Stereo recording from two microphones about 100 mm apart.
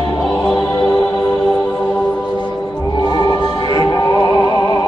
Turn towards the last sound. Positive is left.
turn(degrees=40)  # may be behind; listen again after turning